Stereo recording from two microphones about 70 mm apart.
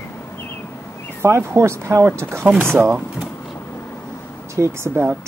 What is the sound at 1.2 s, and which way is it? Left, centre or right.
Speech, right.